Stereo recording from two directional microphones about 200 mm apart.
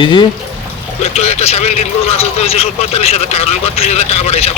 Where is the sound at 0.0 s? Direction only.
25° left (ahead or behind).